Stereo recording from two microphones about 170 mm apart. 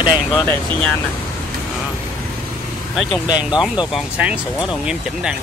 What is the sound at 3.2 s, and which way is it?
Speech, 25° left (ahead or behind).